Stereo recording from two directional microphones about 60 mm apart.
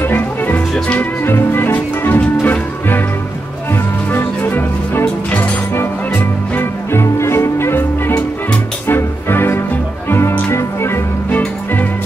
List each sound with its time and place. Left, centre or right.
0.0 s music: left
4.1 s music: left
7.0 s music: left
8.8 s music: left
11.2 s music: left